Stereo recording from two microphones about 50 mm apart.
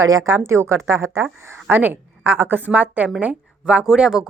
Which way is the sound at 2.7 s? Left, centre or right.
Right.